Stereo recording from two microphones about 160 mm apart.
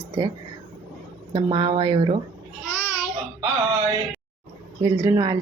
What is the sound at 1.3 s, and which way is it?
Speech, 30° right (ahead or behind).